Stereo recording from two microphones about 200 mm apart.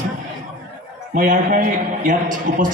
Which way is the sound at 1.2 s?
45° right (ahead or behind).